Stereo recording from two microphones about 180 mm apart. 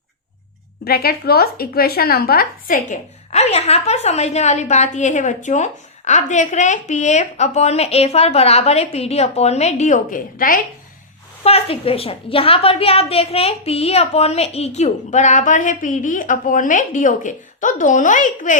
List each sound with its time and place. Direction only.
0.9 s speech: 60° left (ahead or behind)
11.4 s speech: 35° left (ahead or behind)